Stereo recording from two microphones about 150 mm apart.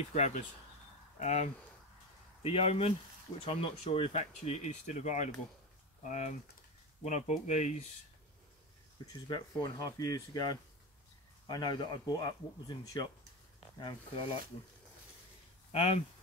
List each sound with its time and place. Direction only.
0.1 s speech: 50° left (ahead or behind)
9.0 s speech: 25° left (ahead or behind)
15.7 s speech: 45° left (ahead or behind)